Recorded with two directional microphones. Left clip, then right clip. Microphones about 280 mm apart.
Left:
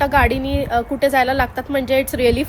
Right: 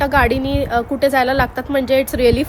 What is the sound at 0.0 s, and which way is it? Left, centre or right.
Speech, centre.